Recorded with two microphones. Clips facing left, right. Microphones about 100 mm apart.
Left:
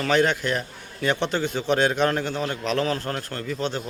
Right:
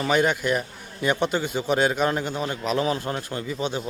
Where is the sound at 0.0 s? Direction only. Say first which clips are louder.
Even; 10° right (ahead or behind).